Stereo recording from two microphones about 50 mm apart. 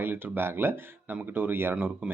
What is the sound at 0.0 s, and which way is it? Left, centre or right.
Speech, right.